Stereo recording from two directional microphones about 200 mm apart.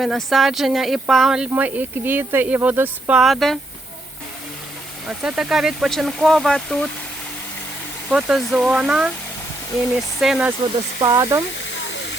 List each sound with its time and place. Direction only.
0.0 s speech: centre (ahead or behind)
5.0 s speech: 5° right (ahead or behind)
8.1 s speech: centre (ahead or behind)
11.0 s speech: 15° right (ahead or behind)